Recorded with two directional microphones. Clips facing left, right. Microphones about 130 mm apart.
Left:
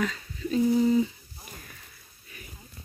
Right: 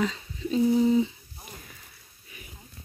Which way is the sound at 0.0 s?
20° right (ahead or behind).